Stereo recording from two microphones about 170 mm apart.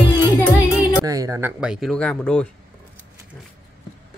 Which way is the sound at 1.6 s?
5° right (ahead or behind).